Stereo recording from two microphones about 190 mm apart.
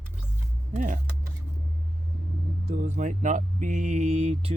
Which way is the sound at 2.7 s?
40° right (ahead or behind).